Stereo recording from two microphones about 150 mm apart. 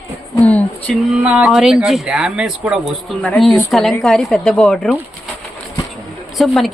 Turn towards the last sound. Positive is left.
turn(degrees=0)  # may be behind; listen again after turning